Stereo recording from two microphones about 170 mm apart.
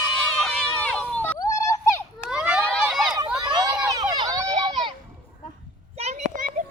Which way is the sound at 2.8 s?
Centre (ahead or behind).